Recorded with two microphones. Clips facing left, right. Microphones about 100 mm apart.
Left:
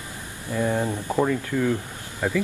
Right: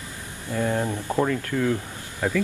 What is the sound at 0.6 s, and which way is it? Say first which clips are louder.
Speech: left 1 dB; 15° left (ahead or behind).